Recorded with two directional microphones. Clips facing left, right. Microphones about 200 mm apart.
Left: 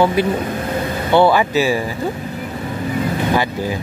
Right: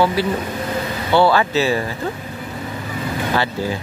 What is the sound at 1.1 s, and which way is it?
Speech, 20° left (ahead or behind).